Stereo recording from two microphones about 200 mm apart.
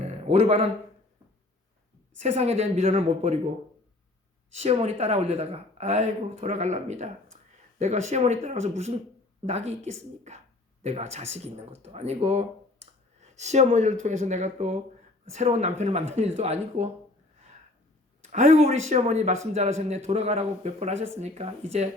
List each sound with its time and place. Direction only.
0.3 s speech: 30° right (ahead or behind)
2.1 s speech: 35° right (ahead or behind)
4.5 s speech: 30° right (ahead or behind)
18.3 s a man's voice: 35° right (ahead or behind)